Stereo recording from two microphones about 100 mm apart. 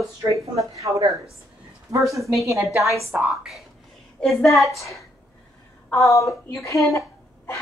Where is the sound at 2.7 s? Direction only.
30° right (ahead or behind).